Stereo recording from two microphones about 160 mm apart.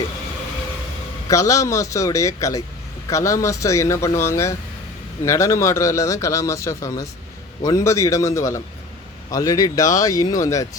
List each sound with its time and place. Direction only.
1.3 s a man's voice: 20° left (ahead or behind)